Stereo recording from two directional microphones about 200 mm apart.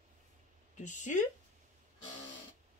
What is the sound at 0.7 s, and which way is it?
Speech, 40° left (ahead or behind).